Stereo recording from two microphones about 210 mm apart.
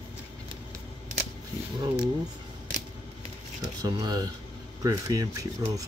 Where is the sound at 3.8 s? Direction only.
20° right (ahead or behind).